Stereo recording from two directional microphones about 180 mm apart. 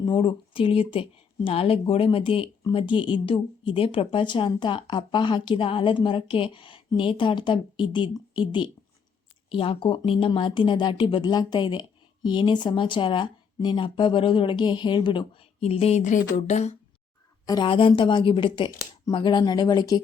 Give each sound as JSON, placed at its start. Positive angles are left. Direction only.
{"t": 0.0, "sound": "speech", "side_deg": 25}
{"t": 17.4, "sound": "speech", "side_deg": 25}